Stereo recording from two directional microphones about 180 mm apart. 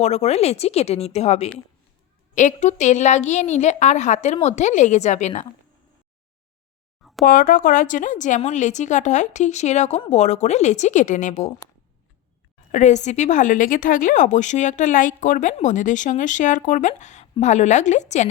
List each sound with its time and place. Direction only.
0.0 s a woman's voice: 40° left (ahead or behind)
7.3 s a woman's voice: 50° left (ahead or behind)
12.7 s a woman's voice: 40° left (ahead or behind)